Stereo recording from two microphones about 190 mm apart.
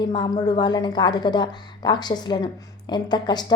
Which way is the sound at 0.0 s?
25° left (ahead or behind).